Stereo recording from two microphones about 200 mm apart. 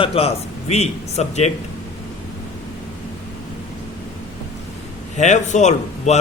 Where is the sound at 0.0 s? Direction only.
30° left (ahead or behind).